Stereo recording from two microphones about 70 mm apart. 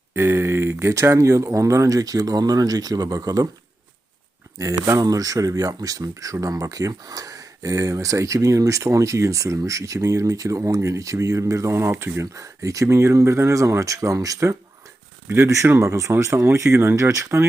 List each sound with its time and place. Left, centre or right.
0.1 s speech: right
4.9 s speech: right
12.3 s speech: right
15.8 s speech: right